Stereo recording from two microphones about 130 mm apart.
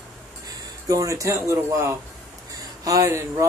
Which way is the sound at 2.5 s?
25° right (ahead or behind).